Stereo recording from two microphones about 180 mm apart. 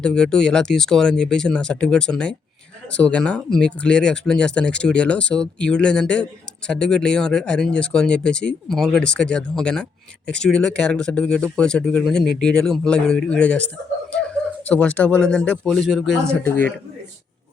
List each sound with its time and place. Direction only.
0.0 s speech: 5° left (ahead or behind)
14.7 s speech: 5° left (ahead or behind)